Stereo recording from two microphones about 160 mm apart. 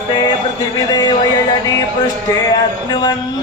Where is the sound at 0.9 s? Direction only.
25° left (ahead or behind).